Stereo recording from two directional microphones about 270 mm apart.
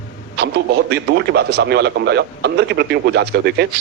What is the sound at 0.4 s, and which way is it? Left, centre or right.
A man's voice, right.